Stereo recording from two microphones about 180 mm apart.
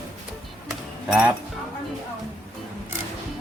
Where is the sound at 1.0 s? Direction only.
5° right (ahead or behind).